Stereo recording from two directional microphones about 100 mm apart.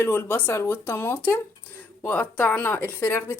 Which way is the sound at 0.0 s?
25° left (ahead or behind).